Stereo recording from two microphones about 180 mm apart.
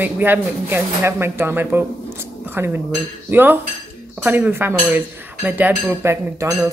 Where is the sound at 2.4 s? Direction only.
10° right (ahead or behind).